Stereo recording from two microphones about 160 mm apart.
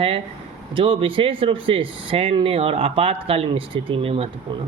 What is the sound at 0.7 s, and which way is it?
Speech, 30° right (ahead or behind).